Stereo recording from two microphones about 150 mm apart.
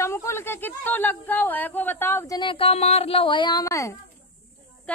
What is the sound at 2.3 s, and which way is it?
A woman's voice, 35° left (ahead or behind).